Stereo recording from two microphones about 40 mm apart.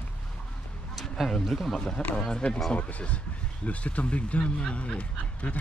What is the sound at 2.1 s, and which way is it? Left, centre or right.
Speech, centre.